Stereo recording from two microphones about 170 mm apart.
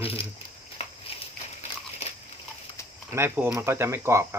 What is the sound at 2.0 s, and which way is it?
Dog, 40° left (ahead or behind).